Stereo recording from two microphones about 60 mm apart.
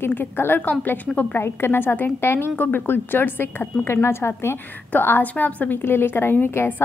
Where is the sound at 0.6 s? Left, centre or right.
Left.